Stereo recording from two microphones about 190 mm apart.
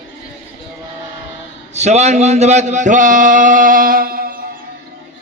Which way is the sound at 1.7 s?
35° right (ahead or behind).